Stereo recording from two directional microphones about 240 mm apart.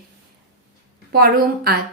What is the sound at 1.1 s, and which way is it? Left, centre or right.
Speech, right.